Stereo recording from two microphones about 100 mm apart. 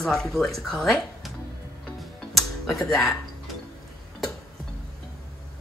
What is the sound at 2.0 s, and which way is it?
Music, centre (ahead or behind).